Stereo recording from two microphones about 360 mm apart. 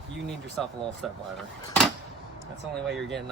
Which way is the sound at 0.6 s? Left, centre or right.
Centre.